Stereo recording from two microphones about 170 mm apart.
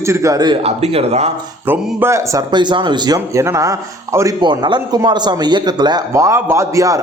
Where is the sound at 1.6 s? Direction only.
10° right (ahead or behind).